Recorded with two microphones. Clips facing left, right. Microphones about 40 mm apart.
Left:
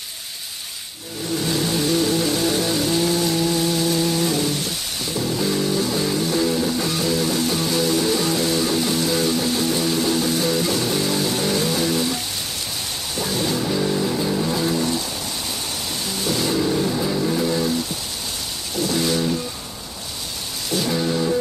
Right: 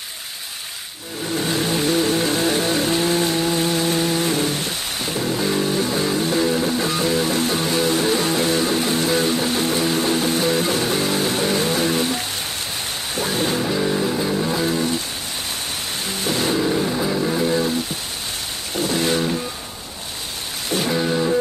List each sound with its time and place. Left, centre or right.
1.4 s vehicle: right
13.1 s music: right
13.7 s vehicle: centre
16.3 s a sound: right
16.5 s vehicle: centre
18.8 s a sound: right
20.9 s music: centre